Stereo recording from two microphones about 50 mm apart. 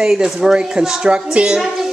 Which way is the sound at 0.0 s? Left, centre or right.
Centre.